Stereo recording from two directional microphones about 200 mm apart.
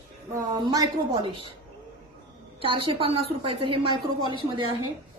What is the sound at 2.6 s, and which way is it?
A woman's voice, 25° right (ahead or behind).